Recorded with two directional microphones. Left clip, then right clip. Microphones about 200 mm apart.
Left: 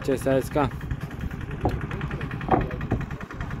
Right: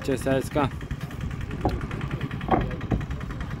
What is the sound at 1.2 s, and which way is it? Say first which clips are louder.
Vehicle: even; 45° right (ahead or behind).